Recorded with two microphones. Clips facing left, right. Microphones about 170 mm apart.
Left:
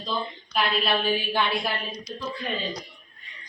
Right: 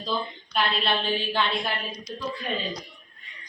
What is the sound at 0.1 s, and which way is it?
A woman's voice, 5° right (ahead or behind).